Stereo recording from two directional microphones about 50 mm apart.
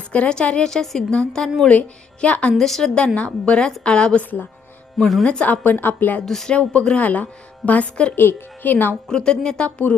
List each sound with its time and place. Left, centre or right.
0.1 s a woman's voice: centre
2.2 s speech: left
2.5 s a woman's voice: centre
3.2 s a woman's voice: left
4.2 s a woman's voice: left
5.2 s speech: left
5.5 s a woman's voice: left
6.2 s a woman's voice: centre
6.5 s speech: left
8.1 s speech: left
9.0 s a woman's voice: centre
9.6 s speech: left